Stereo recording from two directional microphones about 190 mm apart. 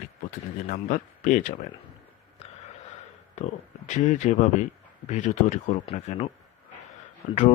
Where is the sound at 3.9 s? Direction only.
40° left (ahead or behind).